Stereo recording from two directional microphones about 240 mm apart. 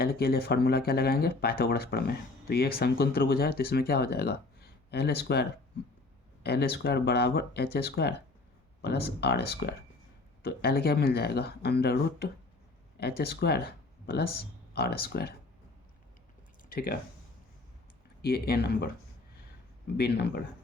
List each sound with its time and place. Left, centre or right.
0.0 s speech: left
16.6 s speech: left
18.2 s speech: left
20.0 s speech: left